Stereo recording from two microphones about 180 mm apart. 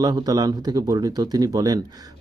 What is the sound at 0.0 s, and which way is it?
A man's voice, 20° right (ahead or behind).